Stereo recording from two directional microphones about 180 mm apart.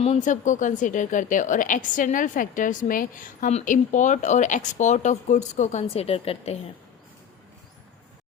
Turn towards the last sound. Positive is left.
turn(degrees=35)  # may be behind; listen again after turning